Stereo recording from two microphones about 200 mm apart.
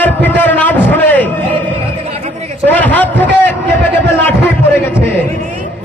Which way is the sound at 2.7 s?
10° left (ahead or behind).